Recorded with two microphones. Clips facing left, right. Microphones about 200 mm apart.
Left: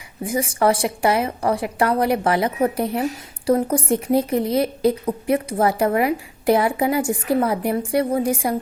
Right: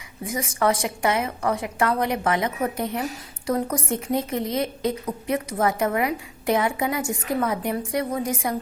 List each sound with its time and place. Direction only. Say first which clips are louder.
0.2 s speech: left 4 dB; 30° left (ahead or behind)